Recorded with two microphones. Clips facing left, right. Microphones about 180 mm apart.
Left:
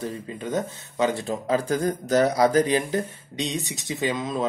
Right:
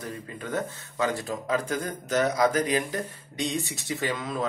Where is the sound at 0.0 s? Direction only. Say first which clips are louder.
Left 5 dB; 20° left (ahead or behind).